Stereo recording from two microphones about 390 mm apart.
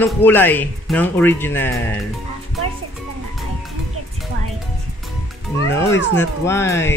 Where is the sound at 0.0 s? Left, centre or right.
Centre.